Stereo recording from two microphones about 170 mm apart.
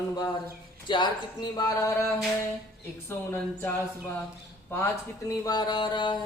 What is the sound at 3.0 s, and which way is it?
Speech, 15° left (ahead or behind).